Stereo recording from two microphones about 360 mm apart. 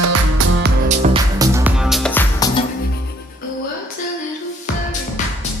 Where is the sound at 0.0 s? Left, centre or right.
Right.